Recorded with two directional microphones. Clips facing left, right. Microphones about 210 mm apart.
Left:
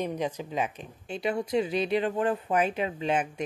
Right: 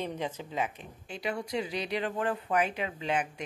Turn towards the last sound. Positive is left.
turn(degrees=25)  # may be behind; listen again after turning